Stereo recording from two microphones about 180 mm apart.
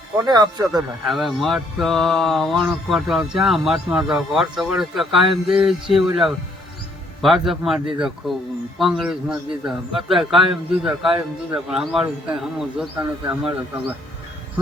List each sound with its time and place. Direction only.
0.3 s speech: 25° right (ahead or behind)
1.0 s speech: centre (ahead or behind)